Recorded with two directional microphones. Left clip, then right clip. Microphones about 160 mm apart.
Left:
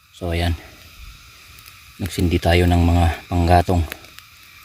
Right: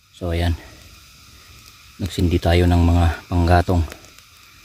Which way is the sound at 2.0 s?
5° left (ahead or behind).